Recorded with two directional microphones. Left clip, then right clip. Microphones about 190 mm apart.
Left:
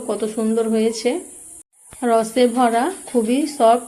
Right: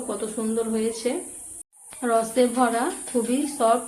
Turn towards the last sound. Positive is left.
turn(degrees=25)  # may be behind; listen again after turning